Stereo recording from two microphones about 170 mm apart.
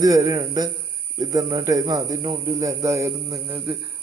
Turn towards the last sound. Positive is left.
turn(degrees=-15)  # may be behind; listen again after turning